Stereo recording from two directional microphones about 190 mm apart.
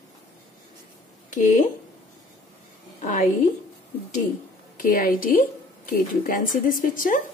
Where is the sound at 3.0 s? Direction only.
40° left (ahead or behind).